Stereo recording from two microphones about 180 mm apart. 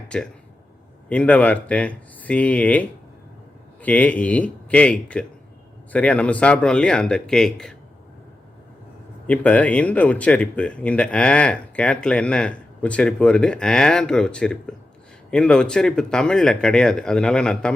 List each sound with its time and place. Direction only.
0.1 s speech: 5° left (ahead or behind)
9.2 s speech: 5° left (ahead or behind)